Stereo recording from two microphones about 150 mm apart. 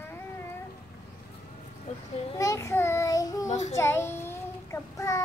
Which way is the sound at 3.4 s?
50° left (ahead or behind).